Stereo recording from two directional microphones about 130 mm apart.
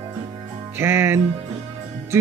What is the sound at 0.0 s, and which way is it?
Music, 25° right (ahead or behind).